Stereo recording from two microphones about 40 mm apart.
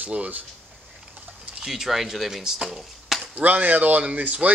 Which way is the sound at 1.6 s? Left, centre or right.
Centre.